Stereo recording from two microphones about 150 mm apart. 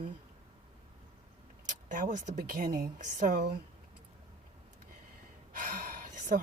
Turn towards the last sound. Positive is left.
turn(degrees=-60)  # may be behind; listen again after turning